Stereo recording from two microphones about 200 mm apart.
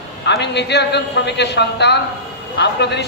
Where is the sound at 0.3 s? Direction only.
60° left (ahead or behind).